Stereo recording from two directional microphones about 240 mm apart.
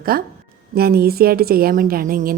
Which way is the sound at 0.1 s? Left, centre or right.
Right.